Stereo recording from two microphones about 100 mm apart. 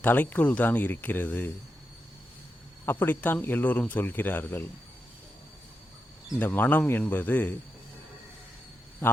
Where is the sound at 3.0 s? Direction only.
20° left (ahead or behind).